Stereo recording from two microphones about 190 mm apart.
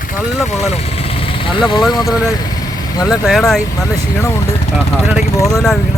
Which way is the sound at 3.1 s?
Centre (ahead or behind).